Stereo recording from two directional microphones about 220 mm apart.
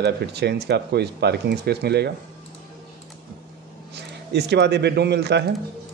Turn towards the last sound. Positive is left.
turn(degrees=-50)  # may be behind; listen again after turning